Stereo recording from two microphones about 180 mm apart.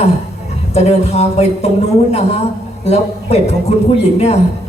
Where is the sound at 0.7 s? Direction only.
35° left (ahead or behind).